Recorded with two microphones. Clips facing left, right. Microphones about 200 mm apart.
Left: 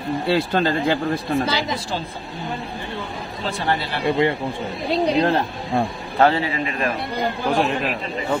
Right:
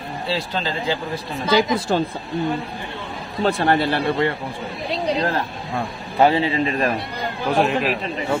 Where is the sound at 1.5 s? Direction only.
50° right (ahead or behind).